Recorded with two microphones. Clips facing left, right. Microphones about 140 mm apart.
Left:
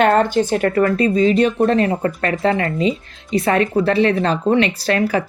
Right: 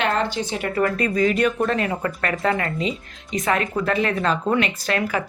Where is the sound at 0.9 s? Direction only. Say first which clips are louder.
Left 5 dB; 25° left (ahead or behind).